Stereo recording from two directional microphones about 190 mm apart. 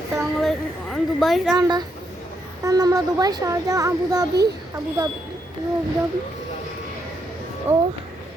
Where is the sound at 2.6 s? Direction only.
20° right (ahead or behind).